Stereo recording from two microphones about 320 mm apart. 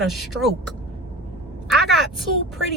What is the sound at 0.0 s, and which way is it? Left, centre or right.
Speech, centre.